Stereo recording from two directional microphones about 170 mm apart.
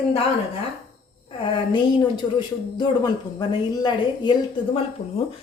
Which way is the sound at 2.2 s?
25° left (ahead or behind).